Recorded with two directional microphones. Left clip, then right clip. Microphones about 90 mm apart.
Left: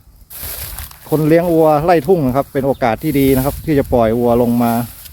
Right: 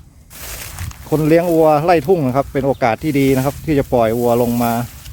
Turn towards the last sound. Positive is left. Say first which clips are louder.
# left 2 dB
turn(degrees=5)  # may be behind; listen again after turning